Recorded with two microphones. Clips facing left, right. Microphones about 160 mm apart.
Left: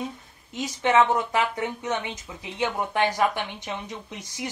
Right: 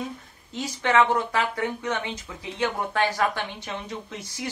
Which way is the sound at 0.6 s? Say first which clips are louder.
Left 1 dB; 20° left (ahead or behind).